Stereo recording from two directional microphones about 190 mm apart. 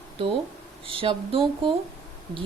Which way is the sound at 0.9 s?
30° right (ahead or behind).